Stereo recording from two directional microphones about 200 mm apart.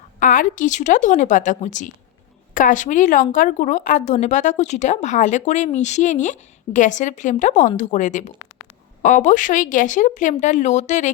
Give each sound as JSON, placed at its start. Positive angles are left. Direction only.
{"t": 0.2, "sound": "a woman's voice", "side_deg": 40}